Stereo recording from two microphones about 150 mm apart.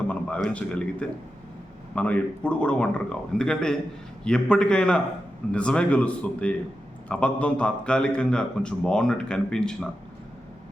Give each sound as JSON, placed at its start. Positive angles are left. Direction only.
{"t": 0.1, "sound": "a man's voice", "side_deg": 10}